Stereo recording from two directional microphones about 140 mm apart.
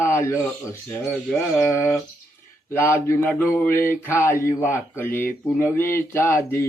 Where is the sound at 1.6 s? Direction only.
20° left (ahead or behind).